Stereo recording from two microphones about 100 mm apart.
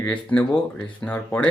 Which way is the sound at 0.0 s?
15° left (ahead or behind).